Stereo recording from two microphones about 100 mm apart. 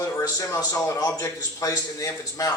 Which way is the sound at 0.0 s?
35° left (ahead or behind).